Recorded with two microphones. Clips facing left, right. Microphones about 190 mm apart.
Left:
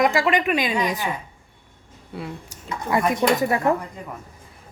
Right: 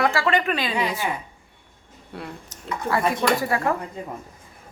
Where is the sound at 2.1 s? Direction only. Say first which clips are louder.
Left 3 dB; centre (ahead or behind).